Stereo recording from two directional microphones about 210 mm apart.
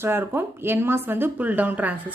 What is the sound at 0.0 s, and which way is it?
A woman's voice, 10° right (ahead or behind).